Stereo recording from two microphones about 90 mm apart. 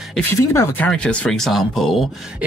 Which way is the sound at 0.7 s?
15° left (ahead or behind).